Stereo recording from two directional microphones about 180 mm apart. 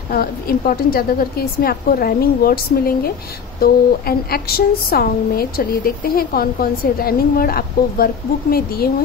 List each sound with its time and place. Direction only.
0.1 s a woman's voice: 55° left (ahead or behind)